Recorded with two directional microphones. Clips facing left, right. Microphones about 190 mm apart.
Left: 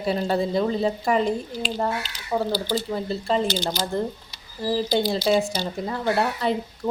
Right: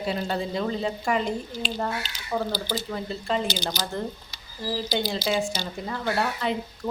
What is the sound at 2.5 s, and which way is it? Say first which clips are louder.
Speech: left 5 dB; 35° left (ahead or behind).